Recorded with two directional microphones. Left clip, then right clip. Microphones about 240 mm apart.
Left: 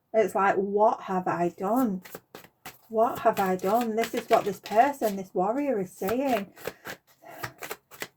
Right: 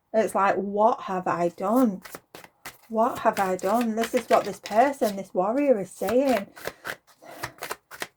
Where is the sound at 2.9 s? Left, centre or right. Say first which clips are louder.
Right 1 dB; right.